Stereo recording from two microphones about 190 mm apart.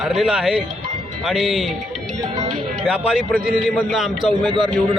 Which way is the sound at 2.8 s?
Centre (ahead or behind).